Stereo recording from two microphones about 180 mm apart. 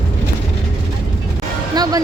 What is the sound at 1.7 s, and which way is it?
Music, 20° right (ahead or behind).